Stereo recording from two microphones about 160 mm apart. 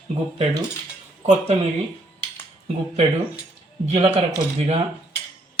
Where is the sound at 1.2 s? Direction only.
40° right (ahead or behind).